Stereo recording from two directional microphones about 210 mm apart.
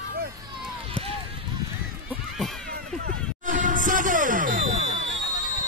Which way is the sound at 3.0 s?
40° right (ahead or behind).